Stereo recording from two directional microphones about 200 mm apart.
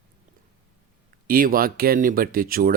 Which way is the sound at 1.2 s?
45° right (ahead or behind).